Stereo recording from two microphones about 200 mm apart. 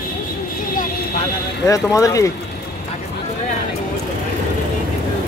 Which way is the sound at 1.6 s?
15° left (ahead or behind).